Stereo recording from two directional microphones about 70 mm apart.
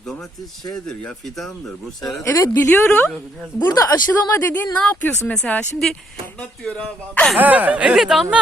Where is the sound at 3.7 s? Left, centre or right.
Left.